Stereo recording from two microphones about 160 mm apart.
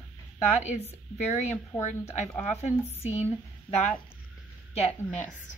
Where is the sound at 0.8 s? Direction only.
45° left (ahead or behind).